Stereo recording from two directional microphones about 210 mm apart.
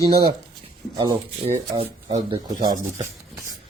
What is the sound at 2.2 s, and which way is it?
Speech, 20° right (ahead or behind).